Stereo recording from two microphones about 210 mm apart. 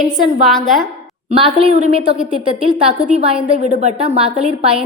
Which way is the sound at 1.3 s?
30° right (ahead or behind).